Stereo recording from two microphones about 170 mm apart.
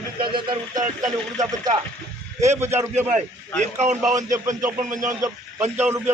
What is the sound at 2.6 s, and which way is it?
Speech, 15° right (ahead or behind).